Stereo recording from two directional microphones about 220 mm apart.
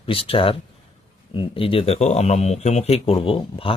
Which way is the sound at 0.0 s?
25° left (ahead or behind).